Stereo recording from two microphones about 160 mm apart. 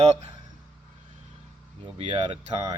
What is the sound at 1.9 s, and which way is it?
Speech, 40° right (ahead or behind).